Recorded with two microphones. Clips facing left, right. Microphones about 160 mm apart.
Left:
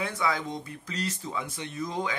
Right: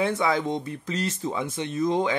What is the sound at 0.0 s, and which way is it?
Speech, 25° right (ahead or behind).